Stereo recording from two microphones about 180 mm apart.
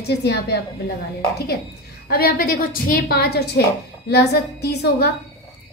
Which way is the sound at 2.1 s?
55° left (ahead or behind).